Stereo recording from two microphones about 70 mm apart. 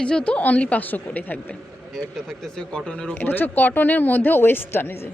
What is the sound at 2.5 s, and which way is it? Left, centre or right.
Speech, centre.